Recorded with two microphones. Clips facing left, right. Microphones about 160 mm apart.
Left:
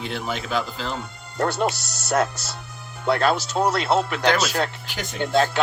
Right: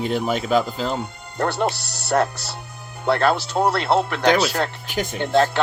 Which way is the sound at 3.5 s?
20° right (ahead or behind).